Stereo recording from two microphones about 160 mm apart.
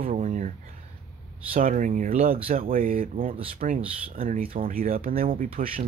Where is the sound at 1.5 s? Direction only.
60° right (ahead or behind).